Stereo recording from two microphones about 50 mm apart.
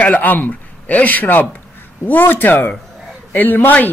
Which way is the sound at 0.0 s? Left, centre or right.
Left.